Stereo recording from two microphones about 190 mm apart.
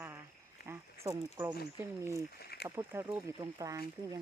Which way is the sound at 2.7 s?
15° right (ahead or behind).